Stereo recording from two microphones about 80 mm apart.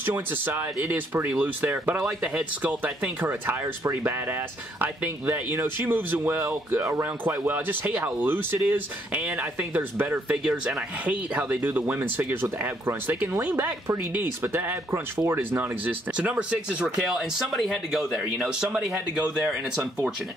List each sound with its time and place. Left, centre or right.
0.0 s speech: right; by 19.9 s centre